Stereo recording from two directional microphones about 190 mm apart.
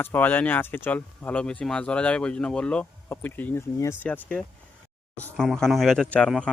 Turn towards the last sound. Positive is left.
turn(degrees=5)  # may be behind; listen again after turning